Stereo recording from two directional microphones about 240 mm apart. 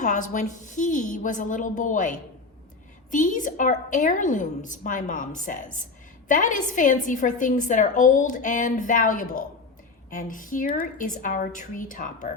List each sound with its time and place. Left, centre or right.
0.0 s a woman's voice: left